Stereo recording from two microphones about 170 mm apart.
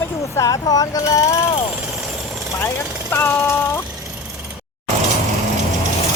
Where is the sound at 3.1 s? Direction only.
10° left (ahead or behind).